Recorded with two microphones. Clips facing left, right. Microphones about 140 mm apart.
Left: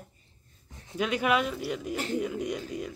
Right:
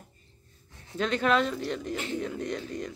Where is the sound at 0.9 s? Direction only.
10° left (ahead or behind).